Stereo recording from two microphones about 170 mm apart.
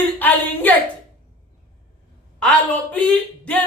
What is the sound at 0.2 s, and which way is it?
Speech, 10° left (ahead or behind).